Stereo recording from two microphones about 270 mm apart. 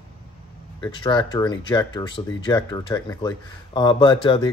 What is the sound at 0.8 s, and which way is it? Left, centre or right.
Speech, centre.